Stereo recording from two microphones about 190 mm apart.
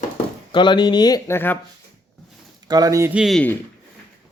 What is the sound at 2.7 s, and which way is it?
Speech, 20° right (ahead or behind).